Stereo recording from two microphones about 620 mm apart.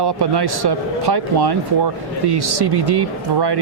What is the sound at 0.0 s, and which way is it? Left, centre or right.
Speech, right.